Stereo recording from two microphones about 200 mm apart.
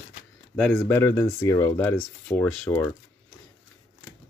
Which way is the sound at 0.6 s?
5° left (ahead or behind).